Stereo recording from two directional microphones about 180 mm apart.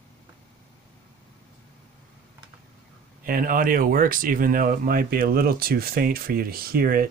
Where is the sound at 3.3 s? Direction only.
50° right (ahead or behind).